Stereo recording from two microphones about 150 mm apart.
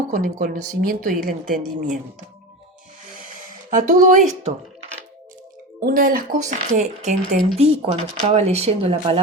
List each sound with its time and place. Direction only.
0.1 s a woman's voice: 70° right (ahead or behind)
3.7 s speech: 60° right (ahead or behind)
5.8 s speech: 70° right (ahead or behind); by 9.2 s 40° right (ahead or behind)